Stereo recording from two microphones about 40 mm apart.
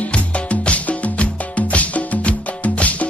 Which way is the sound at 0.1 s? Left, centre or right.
Left.